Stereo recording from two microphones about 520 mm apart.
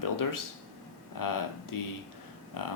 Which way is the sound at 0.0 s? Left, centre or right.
Left.